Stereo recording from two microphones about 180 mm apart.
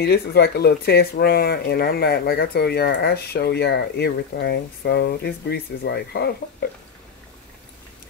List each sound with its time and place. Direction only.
0.0 s speech: 65° left (ahead or behind)